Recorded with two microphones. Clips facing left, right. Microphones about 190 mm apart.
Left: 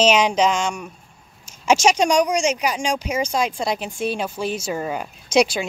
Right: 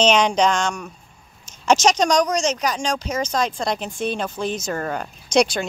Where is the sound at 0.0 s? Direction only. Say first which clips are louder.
Even; 5° left (ahead or behind).